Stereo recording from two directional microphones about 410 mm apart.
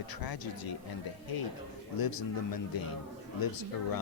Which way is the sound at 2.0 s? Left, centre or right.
Left.